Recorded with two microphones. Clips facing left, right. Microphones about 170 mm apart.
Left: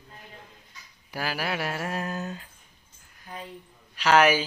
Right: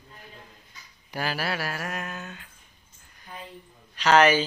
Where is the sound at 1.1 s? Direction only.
5° left (ahead or behind); by 2.5 s 35° left (ahead or behind).